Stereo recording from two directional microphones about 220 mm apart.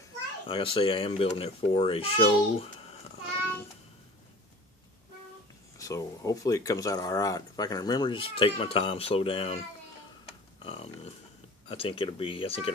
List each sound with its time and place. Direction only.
0.5 s a child's voice: 25° left (ahead or behind)
5.8 s speech: 15° left (ahead or behind)
10.6 s a child's voice: 25° left (ahead or behind)